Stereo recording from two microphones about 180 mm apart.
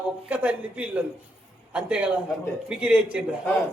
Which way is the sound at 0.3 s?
10° right (ahead or behind).